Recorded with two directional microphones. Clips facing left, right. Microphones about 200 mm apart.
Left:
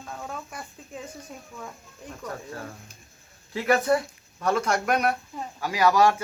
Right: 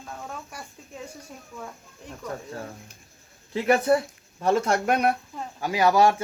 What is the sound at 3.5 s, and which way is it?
Speech, 30° right (ahead or behind).